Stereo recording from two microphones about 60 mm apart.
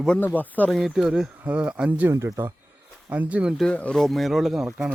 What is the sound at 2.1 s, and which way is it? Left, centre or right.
Speech, right.